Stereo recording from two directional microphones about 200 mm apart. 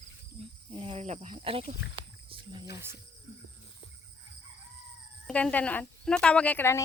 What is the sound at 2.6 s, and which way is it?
Speech, 15° right (ahead or behind).